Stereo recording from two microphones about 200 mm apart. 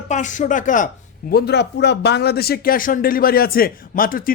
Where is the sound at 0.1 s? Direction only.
40° left (ahead or behind).